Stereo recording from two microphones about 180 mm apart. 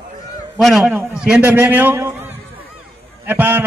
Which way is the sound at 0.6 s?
Centre (ahead or behind).